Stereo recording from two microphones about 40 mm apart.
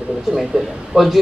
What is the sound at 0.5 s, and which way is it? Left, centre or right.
Speech, centre.